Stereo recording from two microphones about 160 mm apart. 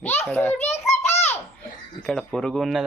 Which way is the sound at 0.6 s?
45° left (ahead or behind).